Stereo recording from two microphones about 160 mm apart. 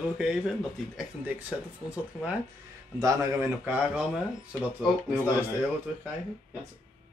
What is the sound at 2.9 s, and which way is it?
Speech, 20° right (ahead or behind).